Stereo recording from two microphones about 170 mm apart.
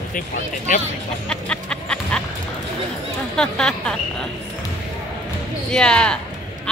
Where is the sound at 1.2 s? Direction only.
5° left (ahead or behind).